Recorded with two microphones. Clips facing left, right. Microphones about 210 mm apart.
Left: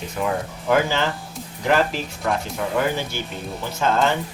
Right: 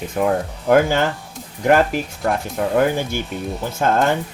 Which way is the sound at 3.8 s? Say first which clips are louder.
Right 3 dB; 50° right (ahead or behind).